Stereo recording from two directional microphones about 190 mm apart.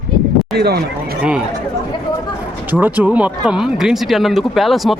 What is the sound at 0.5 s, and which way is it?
Speech, 55° right (ahead or behind).